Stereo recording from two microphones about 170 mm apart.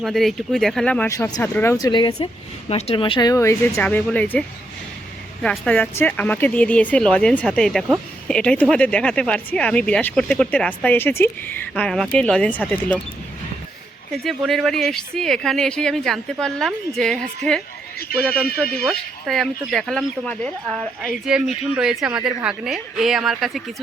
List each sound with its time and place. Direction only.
0.0 s speech: centre (ahead or behind)
14.1 s speech: centre (ahead or behind)
18.1 s a man's voice: 65° left (ahead or behind)
18.9 s speech: centre (ahead or behind)